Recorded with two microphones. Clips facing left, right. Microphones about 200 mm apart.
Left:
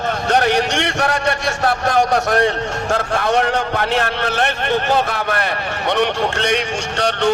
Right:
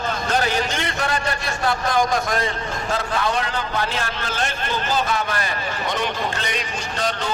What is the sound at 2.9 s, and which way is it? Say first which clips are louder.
A man's voice: left 6 dB; 55° left (ahead or behind).